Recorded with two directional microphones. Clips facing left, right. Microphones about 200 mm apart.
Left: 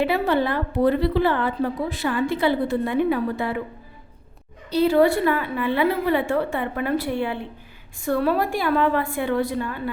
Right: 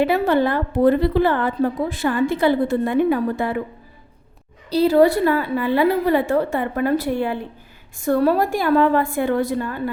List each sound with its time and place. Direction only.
0.0 s a woman's voice: 45° right (ahead or behind)
4.7 s a woman's voice: 35° right (ahead or behind)